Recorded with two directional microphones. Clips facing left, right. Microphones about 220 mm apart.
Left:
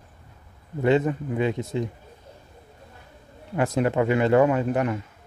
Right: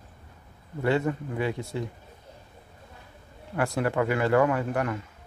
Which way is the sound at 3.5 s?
20° left (ahead or behind).